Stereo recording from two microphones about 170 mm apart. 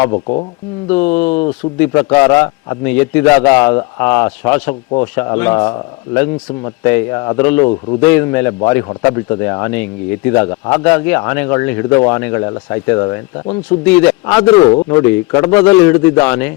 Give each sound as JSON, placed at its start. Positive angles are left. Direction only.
{"t": 0.1, "sound": "speech", "side_deg": 35}
{"t": 0.9, "sound": "a man's voice", "side_deg": 10}
{"t": 6.8, "sound": "speech", "side_deg": 15}
{"t": 13.7, "sound": "speech", "side_deg": 10}
{"t": 15.0, "sound": "speech", "side_deg": 15}